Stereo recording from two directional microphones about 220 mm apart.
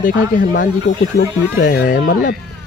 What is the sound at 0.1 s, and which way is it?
Speech, 55° left (ahead or behind).